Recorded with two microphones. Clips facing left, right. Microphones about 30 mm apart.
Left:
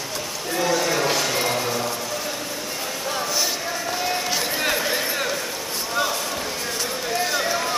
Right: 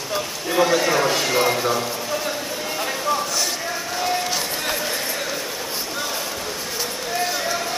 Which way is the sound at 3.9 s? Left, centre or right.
Centre.